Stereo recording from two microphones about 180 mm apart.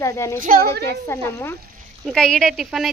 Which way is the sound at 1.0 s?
15° left (ahead or behind).